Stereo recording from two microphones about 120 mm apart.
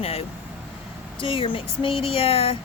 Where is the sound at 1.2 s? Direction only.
45° left (ahead or behind).